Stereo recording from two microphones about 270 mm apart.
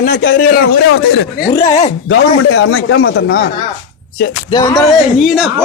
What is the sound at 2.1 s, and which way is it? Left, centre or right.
A man's voice, left.